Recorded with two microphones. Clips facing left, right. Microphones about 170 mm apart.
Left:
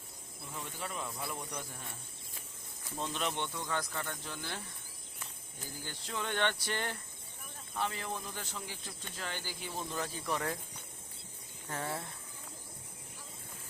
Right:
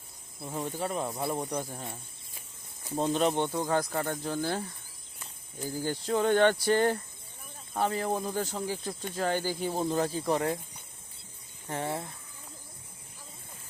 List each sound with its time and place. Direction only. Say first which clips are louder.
0.4 s speech: right 10 dB; 40° right (ahead or behind)
5.8 s speech: right 13 dB; 40° right (ahead or behind)
11.7 s speech: right 6 dB; 20° right (ahead or behind)